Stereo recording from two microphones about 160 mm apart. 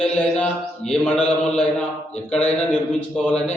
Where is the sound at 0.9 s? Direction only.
5° left (ahead or behind).